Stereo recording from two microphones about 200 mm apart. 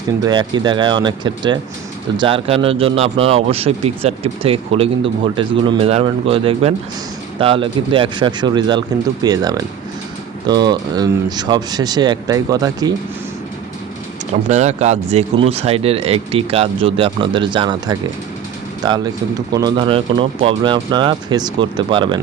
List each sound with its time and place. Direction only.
0.3 s speech: 20° right (ahead or behind)
14.4 s speech: 35° right (ahead or behind)